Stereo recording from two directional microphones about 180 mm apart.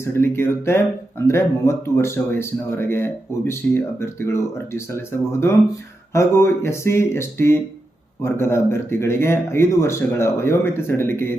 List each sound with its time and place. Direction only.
0.0 s speech: 15° left (ahead or behind)